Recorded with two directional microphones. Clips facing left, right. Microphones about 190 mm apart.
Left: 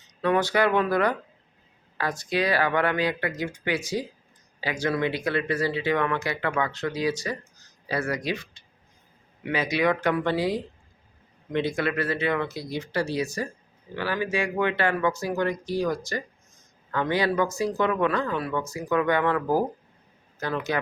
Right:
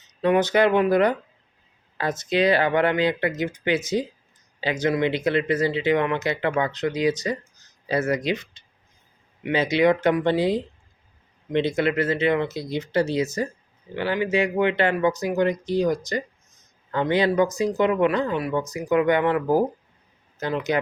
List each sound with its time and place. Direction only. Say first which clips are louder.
0.2 s speech: right 4 dB; 20° right (ahead or behind)